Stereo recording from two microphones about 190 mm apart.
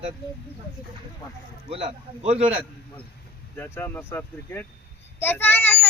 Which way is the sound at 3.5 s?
10° left (ahead or behind).